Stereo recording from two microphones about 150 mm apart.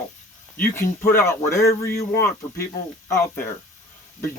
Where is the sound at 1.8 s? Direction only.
90° left.